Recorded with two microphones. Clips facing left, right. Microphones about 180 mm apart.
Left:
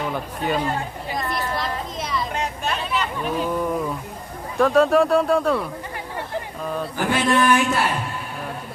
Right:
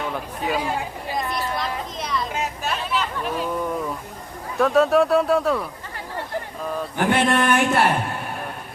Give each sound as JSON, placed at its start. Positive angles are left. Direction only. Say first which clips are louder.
{"t": 0.1, "sound": "speech", "louder": "left 1 dB", "side_deg": -5}
{"t": 1.3, "sound": "a sound", "louder": "even", "side_deg": 0}
{"t": 4.5, "sound": "speech", "louder": "left 1 dB", "side_deg": 0}
{"t": 6.9, "sound": "speech", "louder": "right 1 dB", "side_deg": -60}